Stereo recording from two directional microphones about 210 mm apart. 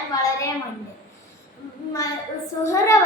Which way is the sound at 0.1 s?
15° left (ahead or behind).